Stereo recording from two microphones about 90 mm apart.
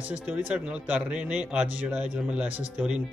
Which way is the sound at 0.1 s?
15° right (ahead or behind).